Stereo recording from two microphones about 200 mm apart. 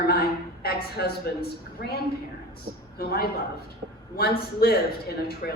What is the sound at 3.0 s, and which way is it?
A woman's voice, 50° left (ahead or behind).